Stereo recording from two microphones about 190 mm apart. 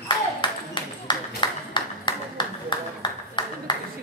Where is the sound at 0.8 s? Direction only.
25° left (ahead or behind).